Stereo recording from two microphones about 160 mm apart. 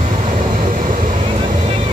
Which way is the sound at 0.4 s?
55° right (ahead or behind).